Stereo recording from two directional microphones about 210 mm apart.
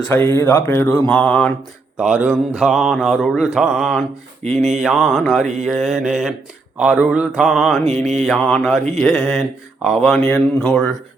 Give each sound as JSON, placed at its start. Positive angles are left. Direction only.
{"t": 0.1, "sound": "speech", "side_deg": 10}
{"t": 2.0, "sound": "speech", "side_deg": -5}
{"t": 4.4, "sound": "speech", "side_deg": -30}
{"t": 4.8, "sound": "speech", "side_deg": 0}